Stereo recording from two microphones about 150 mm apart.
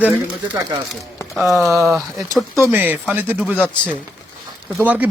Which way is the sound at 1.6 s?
Centre (ahead or behind).